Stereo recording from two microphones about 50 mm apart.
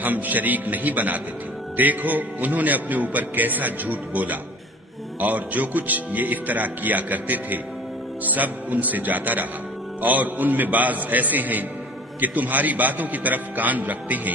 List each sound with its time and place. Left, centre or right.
0.0 s a man's voice: right